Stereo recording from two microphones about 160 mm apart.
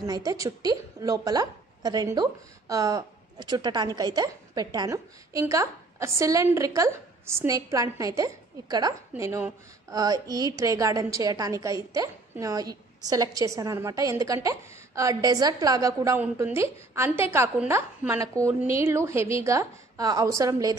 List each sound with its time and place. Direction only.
0.0 s a woman's voice: 20° right (ahead or behind)